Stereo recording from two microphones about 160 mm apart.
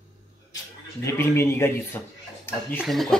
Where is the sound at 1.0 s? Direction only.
20° left (ahead or behind).